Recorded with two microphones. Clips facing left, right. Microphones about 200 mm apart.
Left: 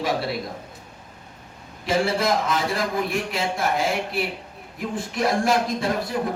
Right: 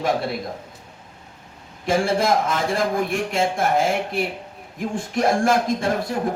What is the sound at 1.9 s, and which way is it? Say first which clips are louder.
A man's voice: right 2 dB; 50° right (ahead or behind).